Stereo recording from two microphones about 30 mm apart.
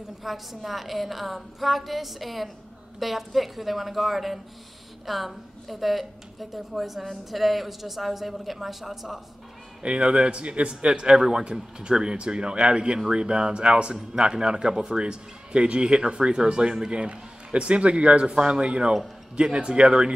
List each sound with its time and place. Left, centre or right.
0.2 s a woman's voice: centre
10.0 s speech: right
10.9 s a man's voice: right
11.1 s a woman's voice: centre
11.8 s a man's voice: right